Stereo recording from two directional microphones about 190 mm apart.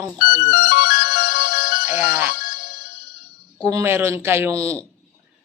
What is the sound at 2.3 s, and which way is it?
Music, 50° left (ahead or behind).